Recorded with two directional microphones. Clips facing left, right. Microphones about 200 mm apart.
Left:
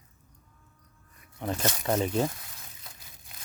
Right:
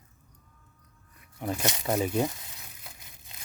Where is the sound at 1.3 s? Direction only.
10° right (ahead or behind).